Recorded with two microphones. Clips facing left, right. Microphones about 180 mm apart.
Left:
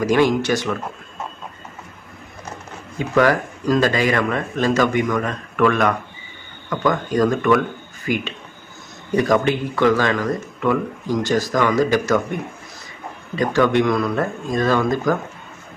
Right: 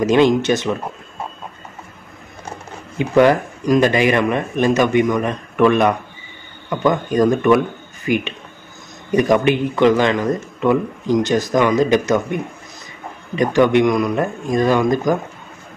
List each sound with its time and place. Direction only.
0.0 s speech: 20° right (ahead or behind)
3.0 s speech: 20° right (ahead or behind)
13.4 s speech: 20° right (ahead or behind)